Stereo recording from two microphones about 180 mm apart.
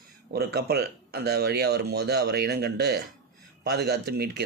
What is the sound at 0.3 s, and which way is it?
Speech, 65° right (ahead or behind).